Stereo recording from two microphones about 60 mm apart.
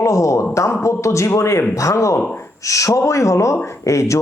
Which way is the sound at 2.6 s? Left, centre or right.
Left.